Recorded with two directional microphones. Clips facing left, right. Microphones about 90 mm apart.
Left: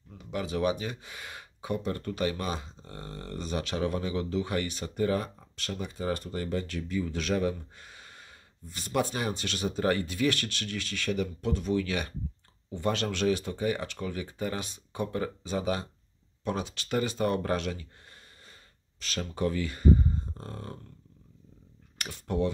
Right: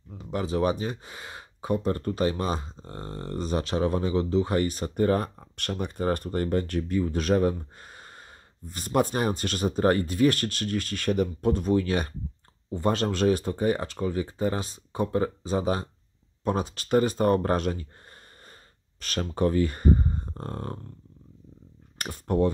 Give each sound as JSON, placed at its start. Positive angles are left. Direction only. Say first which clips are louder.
{"t": 0.2, "sound": "speech", "louder": "right 3 dB", "side_deg": -35}
{"t": 18.9, "sound": "speech", "louder": "right 5 dB", "side_deg": -50}
{"t": 21.9, "sound": "speech", "louder": "right 5 dB", "side_deg": -45}